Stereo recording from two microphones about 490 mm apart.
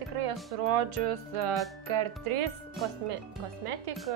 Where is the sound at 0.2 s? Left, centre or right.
Right.